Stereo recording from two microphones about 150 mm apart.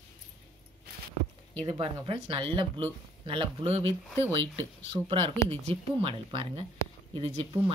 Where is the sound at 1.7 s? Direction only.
35° right (ahead or behind).